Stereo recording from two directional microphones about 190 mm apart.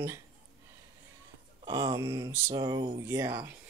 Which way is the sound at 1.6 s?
20° right (ahead or behind).